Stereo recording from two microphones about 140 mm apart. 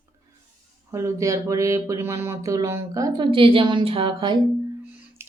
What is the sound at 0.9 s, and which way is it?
Speech, 20° right (ahead or behind).